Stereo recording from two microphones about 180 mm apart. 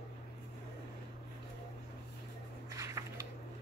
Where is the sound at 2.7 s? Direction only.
15° right (ahead or behind).